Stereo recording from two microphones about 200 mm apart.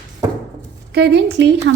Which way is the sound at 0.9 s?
55° right (ahead or behind).